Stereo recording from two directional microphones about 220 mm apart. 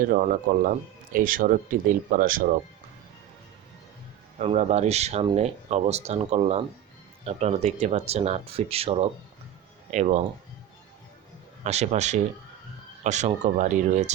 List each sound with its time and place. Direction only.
0.0 s speech: 40° right (ahead or behind)
4.4 s speech: 30° right (ahead or behind)
11.6 s speech: 30° right (ahead or behind)